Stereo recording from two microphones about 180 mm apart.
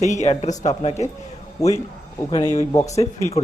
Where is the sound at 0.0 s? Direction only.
40° left (ahead or behind).